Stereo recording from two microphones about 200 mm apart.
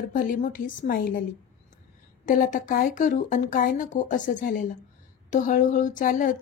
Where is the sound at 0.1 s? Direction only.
40° left (ahead or behind).